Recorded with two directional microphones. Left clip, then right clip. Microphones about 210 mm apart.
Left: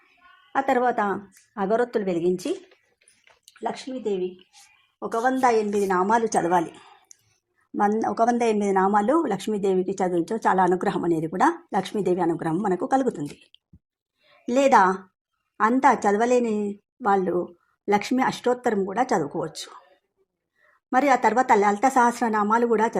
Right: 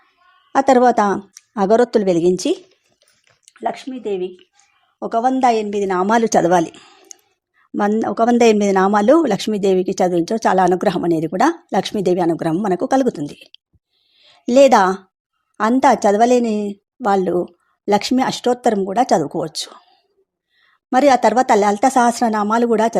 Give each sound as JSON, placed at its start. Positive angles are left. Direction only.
{"t": 0.5, "sound": "speech", "side_deg": -50}
{"t": 3.5, "sound": "speech", "side_deg": -35}
{"t": 7.1, "sound": "a sound", "side_deg": -45}
{"t": 7.8, "sound": "speech", "side_deg": -55}
{"t": 20.9, "sound": "speech", "side_deg": -45}